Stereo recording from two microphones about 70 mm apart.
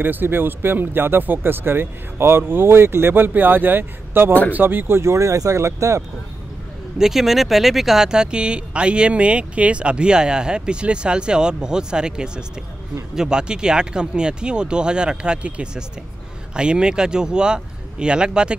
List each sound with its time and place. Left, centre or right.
0.0 s speech: right
7.0 s speech: centre